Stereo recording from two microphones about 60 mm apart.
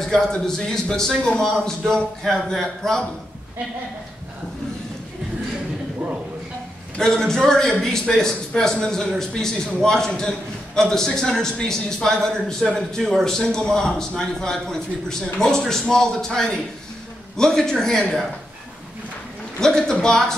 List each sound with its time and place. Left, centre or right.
0.1 s a man's voice: centre
7.0 s a man's voice: centre
19.6 s a man's voice: centre